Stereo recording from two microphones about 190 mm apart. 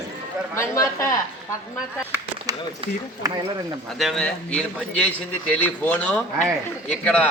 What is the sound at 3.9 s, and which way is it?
Speech, centre (ahead or behind).